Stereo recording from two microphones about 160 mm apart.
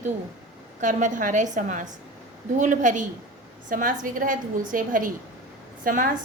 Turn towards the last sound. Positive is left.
turn(degrees=-60)  # may be behind; listen again after turning